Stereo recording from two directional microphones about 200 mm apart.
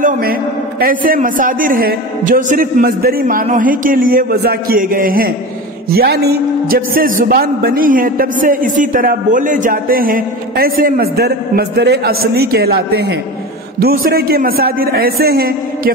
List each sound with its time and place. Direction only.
0.0 s a man's voice: 50° right (ahead or behind)